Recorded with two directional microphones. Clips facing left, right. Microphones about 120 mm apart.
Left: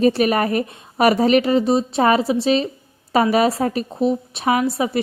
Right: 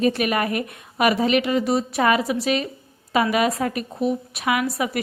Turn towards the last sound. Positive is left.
turn(degrees=25)  # may be behind; listen again after turning